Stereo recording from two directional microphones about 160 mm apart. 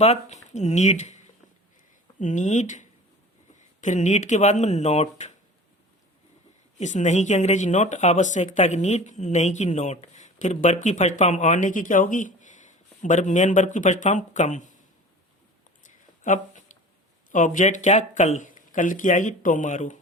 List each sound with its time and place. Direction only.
0.0 s speech: 45° left (ahead or behind)
6.7 s speech: 45° left (ahead or behind)
15.8 s a sound: 55° left (ahead or behind)
17.3 s speech: 55° left (ahead or behind)